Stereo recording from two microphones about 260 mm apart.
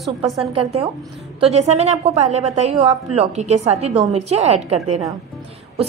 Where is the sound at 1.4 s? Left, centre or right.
Right.